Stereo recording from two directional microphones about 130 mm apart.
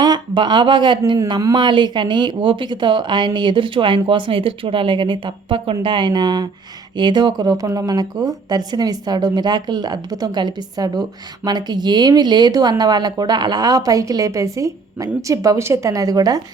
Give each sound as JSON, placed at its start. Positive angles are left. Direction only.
{"t": 0.0, "sound": "speech", "side_deg": -35}